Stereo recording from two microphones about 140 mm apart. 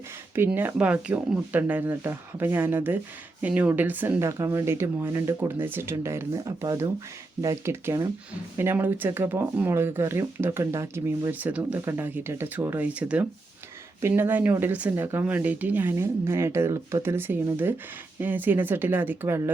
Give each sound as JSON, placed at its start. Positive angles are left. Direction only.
{"t": 0.3, "sound": "speech", "side_deg": -15}